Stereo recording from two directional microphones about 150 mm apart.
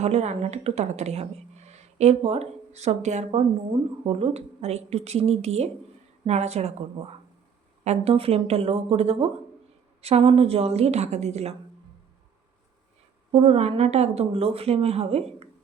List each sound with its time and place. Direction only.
0.0 s speech: 45° right (ahead or behind)
7.9 s speech: 40° right (ahead or behind)
13.3 s speech: 40° right (ahead or behind)